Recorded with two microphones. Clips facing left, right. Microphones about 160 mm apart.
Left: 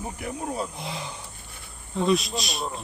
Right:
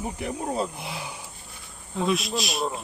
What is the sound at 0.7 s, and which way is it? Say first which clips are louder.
Speech: left 1 dB; 5° right (ahead or behind).